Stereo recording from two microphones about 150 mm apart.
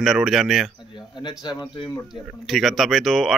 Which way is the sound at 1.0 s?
30° left (ahead or behind).